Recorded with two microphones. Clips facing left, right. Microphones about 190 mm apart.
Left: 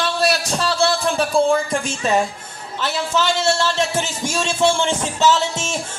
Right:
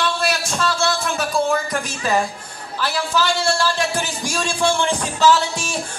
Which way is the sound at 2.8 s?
25° left (ahead or behind).